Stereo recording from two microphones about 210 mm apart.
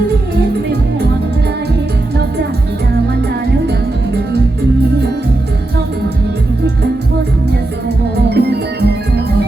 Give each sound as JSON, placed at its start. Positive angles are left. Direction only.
{"t": 8.3, "sound": "music", "side_deg": -50}